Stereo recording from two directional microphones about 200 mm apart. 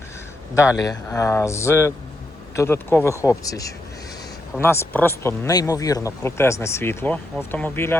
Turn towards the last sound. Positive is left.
turn(degrees=10)  # may be behind; listen again after turning